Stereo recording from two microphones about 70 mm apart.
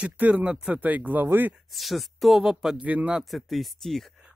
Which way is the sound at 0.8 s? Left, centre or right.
Right.